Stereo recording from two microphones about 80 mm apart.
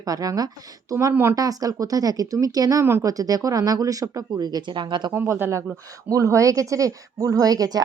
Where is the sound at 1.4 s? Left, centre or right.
Right.